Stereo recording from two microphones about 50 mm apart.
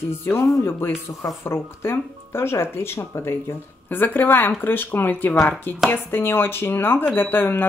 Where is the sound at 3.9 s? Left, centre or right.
Left.